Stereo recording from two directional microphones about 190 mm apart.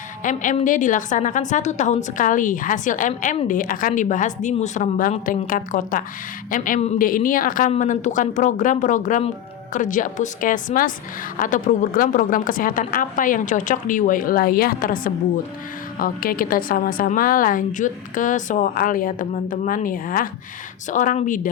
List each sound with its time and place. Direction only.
0.2 s a woman's voice: 40° left (ahead or behind)